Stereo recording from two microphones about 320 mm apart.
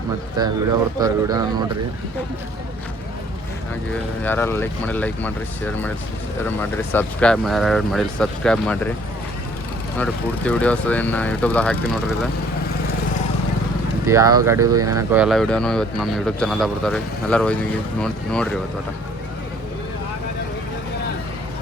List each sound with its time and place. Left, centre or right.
0.3 s speech: centre
4.2 s speech: centre
10.0 s speech: centre
14.1 s speech: centre